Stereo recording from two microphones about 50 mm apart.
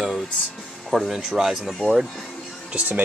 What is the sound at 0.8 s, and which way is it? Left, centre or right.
Speech, centre.